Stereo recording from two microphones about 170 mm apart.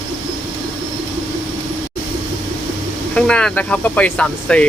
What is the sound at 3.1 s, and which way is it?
Speech, 5° left (ahead or behind).